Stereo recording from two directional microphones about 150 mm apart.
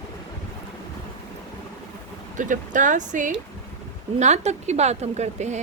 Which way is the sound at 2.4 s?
60° right (ahead or behind).